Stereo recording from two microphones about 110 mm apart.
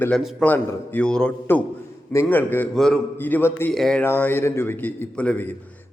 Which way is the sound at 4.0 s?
15° left (ahead or behind).